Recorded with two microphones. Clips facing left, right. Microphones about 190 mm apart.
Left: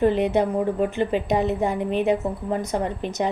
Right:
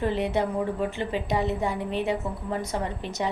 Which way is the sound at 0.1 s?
20° left (ahead or behind).